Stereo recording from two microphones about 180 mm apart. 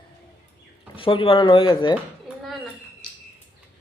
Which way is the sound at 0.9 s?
30° left (ahead or behind).